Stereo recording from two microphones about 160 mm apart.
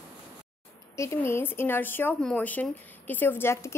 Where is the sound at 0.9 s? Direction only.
15° left (ahead or behind).